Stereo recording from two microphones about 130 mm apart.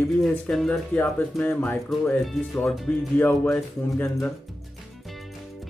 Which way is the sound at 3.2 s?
15° left (ahead or behind).